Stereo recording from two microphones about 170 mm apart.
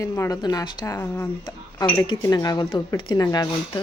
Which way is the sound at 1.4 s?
25° left (ahead or behind).